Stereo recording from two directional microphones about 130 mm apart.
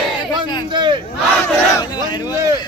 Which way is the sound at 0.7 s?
35° right (ahead or behind).